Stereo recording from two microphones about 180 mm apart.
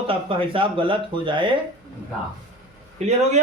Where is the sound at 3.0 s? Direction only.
35° right (ahead or behind).